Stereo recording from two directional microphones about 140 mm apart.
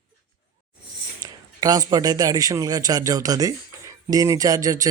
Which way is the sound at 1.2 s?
25° right (ahead or behind).